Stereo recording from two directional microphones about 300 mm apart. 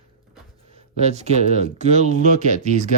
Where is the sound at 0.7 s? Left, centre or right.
Right.